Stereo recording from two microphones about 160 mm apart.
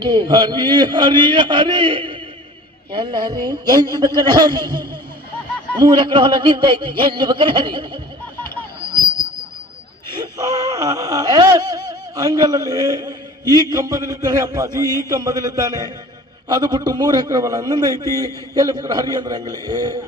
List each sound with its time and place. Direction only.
0.0 s a man's voice: 25° right (ahead or behind)
10.3 s a man's voice: 20° right (ahead or behind)